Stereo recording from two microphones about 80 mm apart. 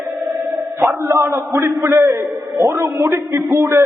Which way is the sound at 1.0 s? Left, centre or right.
Right.